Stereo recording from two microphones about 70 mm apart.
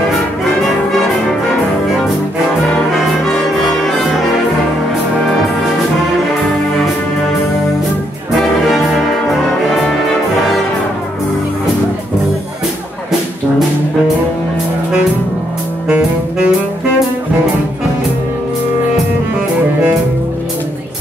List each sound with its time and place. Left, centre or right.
2.9 s brass instrument: centre
8.6 s brass instrument: centre
15.9 s saxophone: centre